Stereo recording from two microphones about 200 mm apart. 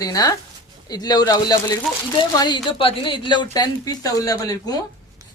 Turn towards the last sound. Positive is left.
turn(degrees=20)  # may be behind; listen again after turning